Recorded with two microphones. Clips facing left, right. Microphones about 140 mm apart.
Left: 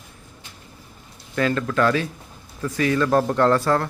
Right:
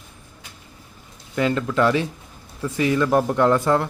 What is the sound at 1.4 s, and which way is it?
A man's voice, 20° right (ahead or behind).